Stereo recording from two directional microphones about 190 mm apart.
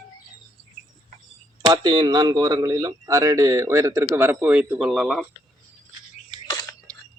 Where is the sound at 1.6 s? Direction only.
25° right (ahead or behind); by 5.3 s centre (ahead or behind).